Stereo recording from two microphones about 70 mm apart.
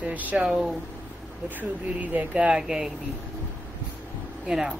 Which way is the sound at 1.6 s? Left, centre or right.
Right.